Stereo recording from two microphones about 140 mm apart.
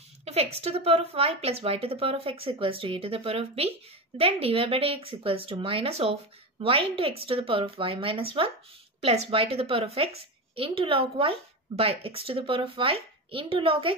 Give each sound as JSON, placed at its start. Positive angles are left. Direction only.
{"t": 0.2, "sound": "a woman's voice", "side_deg": -45}